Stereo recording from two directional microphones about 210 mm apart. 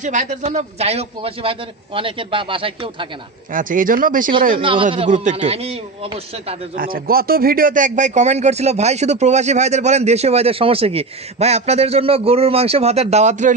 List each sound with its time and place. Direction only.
0.0 s a man's voice: 35° right (ahead or behind)
3.5 s speech: 40° right (ahead or behind)
4.6 s a man's voice: 25° right (ahead or behind)
6.8 s speech: 45° right (ahead or behind)